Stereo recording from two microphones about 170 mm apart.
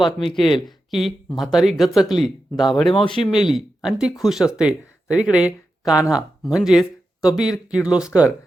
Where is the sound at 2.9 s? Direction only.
30° left (ahead or behind).